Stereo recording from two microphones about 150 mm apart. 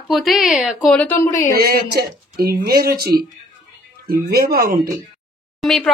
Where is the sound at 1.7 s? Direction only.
90° right.